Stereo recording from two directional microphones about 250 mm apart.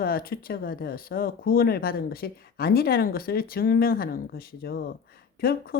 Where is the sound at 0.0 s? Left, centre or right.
Left.